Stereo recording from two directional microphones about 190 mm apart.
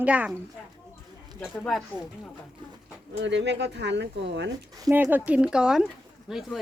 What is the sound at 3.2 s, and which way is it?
Speech, 70° right (ahead or behind).